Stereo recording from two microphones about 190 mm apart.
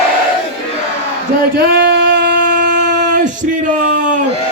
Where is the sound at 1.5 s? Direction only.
60° right (ahead or behind); by 4.2 s 40° right (ahead or behind).